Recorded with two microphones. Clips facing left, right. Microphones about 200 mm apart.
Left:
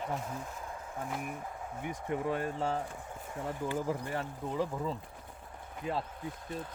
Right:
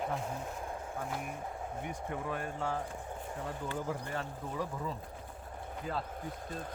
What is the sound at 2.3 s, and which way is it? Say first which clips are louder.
Speech: left 3 dB; 25° left (ahead or behind).